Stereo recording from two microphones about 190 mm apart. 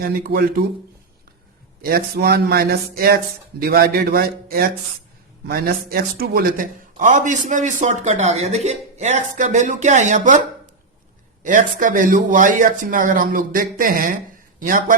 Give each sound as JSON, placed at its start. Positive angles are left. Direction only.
{"t": 0.0, "sound": "speech", "side_deg": -50}
{"t": 1.8, "sound": "a man's voice", "side_deg": -55}
{"t": 11.4, "sound": "speech", "side_deg": -45}